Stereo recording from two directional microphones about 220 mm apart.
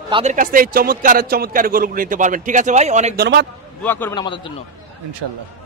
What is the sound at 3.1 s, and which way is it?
Speech, 50° right (ahead or behind).